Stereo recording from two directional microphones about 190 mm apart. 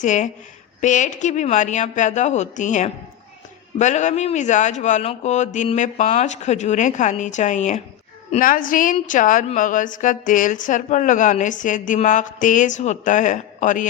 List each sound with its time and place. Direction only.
0.0 s a woman's voice: 40° left (ahead or behind)